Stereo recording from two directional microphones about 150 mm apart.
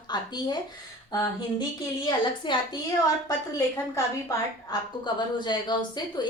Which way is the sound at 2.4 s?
30° left (ahead or behind).